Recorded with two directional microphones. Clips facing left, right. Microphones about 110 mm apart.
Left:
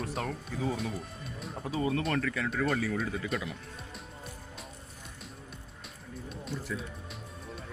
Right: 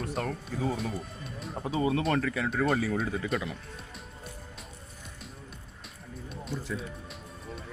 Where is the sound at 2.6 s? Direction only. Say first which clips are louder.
Right 3 dB; 40° right (ahead or behind).